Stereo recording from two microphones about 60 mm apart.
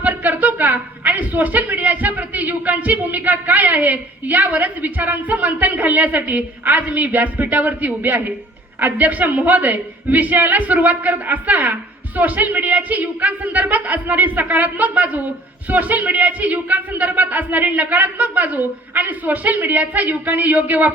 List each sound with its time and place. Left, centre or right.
0.0 s speech: right